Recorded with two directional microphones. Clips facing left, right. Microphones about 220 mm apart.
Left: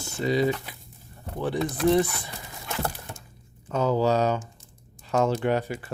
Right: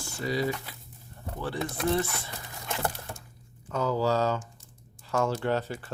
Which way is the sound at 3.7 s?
20° left (ahead or behind).